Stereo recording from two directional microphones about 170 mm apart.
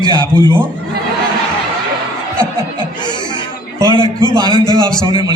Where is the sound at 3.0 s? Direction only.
25° left (ahead or behind).